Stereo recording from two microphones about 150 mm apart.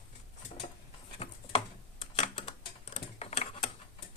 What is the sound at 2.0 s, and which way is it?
Typing, 40° left (ahead or behind).